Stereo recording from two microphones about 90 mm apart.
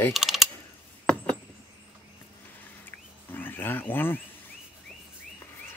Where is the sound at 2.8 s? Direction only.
20° left (ahead or behind).